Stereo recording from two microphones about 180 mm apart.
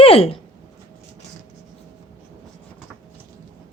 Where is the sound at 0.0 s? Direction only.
30° left (ahead or behind).